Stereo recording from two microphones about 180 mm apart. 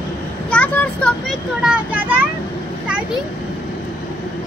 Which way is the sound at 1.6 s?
10° right (ahead or behind).